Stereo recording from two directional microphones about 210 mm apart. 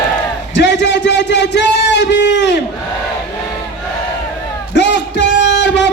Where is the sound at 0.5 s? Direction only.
55° left (ahead or behind).